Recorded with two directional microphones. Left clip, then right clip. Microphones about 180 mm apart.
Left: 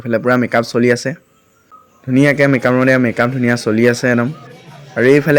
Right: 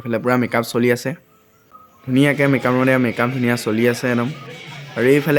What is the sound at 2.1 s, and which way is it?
Speech, 15° left (ahead or behind).